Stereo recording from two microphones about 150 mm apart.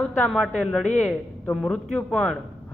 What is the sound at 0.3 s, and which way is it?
Speech, centre (ahead or behind).